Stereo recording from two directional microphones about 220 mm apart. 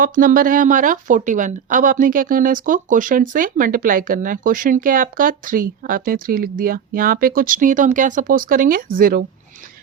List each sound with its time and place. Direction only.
0.0 s speech: 40° right (ahead or behind)